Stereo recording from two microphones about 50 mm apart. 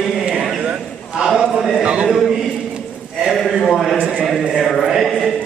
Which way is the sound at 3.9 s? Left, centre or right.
Right.